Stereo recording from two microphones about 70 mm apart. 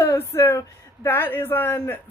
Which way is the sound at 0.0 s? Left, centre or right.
Left.